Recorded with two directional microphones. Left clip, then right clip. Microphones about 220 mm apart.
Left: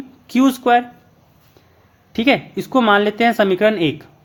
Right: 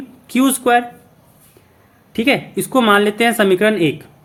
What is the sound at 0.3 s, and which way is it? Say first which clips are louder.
Speech: even; 20° left (ahead or behind).